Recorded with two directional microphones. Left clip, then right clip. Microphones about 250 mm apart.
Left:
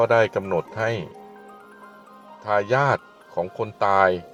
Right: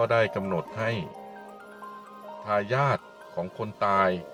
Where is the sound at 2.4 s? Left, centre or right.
Centre.